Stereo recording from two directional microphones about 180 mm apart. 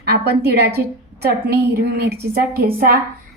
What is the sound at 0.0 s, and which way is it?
A woman's voice, 65° right (ahead or behind).